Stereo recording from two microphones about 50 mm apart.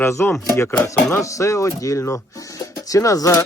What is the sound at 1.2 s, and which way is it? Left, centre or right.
Speech, left.